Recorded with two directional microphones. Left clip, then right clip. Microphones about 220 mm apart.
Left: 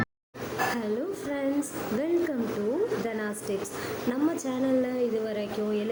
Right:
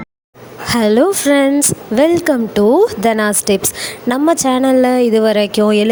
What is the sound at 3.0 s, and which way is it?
A woman's voice, 50° right (ahead or behind).